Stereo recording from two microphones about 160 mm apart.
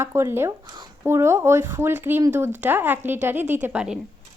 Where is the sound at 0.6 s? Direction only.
30° right (ahead or behind).